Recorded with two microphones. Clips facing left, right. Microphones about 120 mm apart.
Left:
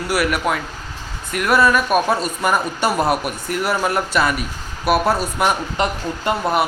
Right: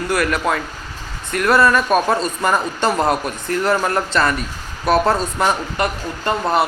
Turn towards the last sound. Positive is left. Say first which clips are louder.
# even
turn(degrees=15)  # may be behind; listen again after turning